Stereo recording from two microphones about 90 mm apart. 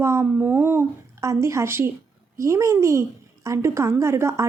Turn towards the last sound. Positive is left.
turn(degrees=-30)  # may be behind; listen again after turning